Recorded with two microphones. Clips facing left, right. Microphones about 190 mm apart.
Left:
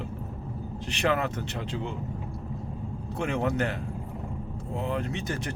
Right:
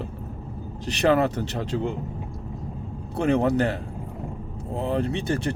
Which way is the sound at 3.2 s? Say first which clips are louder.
Right 7 dB; 35° right (ahead or behind).